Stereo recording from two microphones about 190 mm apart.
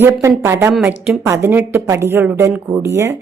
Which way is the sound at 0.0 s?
10° right (ahead or behind).